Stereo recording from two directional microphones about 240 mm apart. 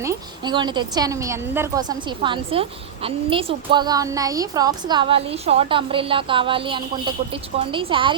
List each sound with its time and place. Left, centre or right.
0.0 s a woman's voice: centre